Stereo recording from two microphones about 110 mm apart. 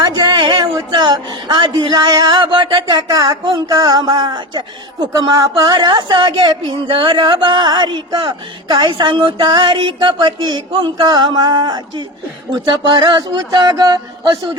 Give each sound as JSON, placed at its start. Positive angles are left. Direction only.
{"t": 0.1, "sound": "speech", "side_deg": -45}